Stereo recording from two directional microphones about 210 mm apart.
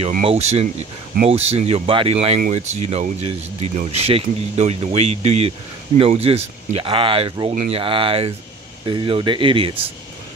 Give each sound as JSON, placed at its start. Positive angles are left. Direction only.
{"t": 0.1, "sound": "speech", "side_deg": -30}